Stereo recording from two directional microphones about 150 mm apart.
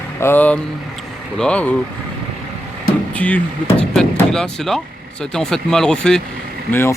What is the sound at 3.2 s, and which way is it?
Speech, 10° left (ahead or behind).